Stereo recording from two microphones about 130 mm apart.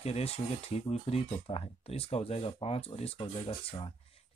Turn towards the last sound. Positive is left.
turn(degrees=45)  # may be behind; listen again after turning